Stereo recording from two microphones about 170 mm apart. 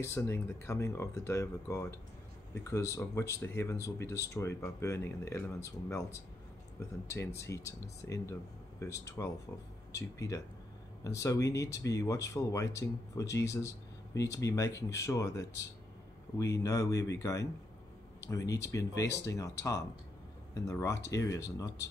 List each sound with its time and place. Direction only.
0.0 s speech: 15° left (ahead or behind)
7.3 s speech: 15° left (ahead or behind)
18.2 s speech: 20° left (ahead or behind)